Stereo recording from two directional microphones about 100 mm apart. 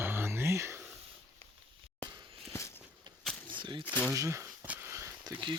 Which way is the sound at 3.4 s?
55° right (ahead or behind).